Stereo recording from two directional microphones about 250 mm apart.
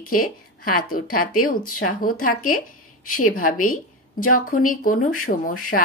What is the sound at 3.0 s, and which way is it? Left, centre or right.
Speech, left.